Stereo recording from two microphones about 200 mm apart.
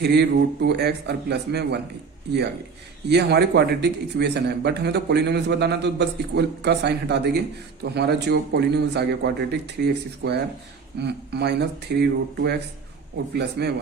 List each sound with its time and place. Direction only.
0.0 s a man's voice: 55° right (ahead or behind)
3.1 s a man's voice: 55° right (ahead or behind)